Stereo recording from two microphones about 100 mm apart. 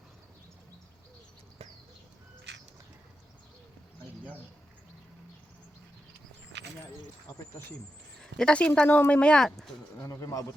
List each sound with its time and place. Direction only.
8.2 s speech: 10° left (ahead or behind)
10.0 s speech: 30° left (ahead or behind)